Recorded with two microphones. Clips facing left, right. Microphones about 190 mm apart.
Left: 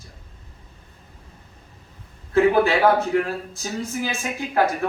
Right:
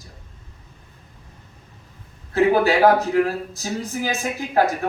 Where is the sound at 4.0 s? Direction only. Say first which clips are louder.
Right 2 dB; 40° right (ahead or behind).